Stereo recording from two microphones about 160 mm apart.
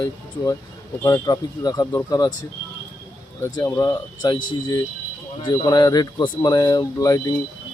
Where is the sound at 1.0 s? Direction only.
20° left (ahead or behind).